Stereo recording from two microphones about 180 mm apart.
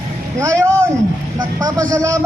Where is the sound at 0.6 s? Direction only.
15° right (ahead or behind).